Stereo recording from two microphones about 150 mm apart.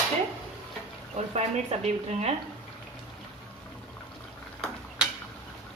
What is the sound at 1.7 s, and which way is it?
Speech, 45° right (ahead or behind).